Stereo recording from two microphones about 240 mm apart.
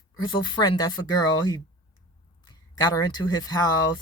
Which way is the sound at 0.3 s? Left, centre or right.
Centre.